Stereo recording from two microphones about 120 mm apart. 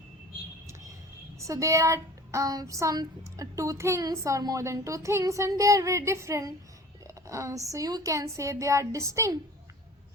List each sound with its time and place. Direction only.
1.4 s a woman's voice: 25° right (ahead or behind)